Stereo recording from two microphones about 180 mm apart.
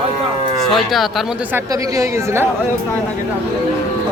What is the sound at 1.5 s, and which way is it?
Speech, 15° right (ahead or behind).